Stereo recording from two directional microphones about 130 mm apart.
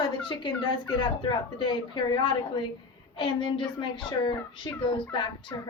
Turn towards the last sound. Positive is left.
turn(degrees=35)  # may be behind; listen again after turning